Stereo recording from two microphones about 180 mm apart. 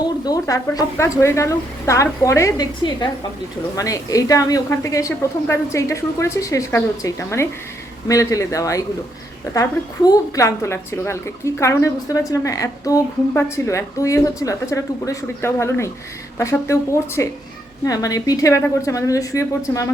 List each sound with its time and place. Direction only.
0.3 s speech: 20° left (ahead or behind)